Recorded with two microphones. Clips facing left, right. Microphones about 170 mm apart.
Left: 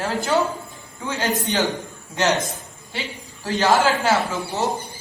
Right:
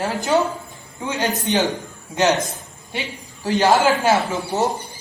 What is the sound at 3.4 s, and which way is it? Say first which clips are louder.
Speech: right 2 dB; 20° right (ahead or behind).